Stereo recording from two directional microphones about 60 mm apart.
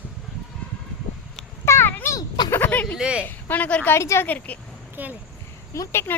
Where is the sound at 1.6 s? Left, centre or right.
Left.